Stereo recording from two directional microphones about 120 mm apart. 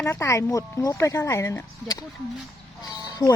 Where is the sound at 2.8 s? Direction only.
35° left (ahead or behind).